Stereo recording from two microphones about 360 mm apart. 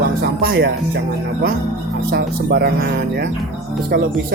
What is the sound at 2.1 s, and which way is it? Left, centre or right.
Speech, right.